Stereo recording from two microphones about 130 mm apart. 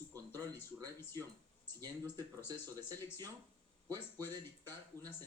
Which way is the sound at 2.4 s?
15° left (ahead or behind).